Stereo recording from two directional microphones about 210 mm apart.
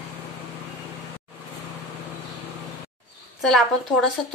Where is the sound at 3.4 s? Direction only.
Centre (ahead or behind).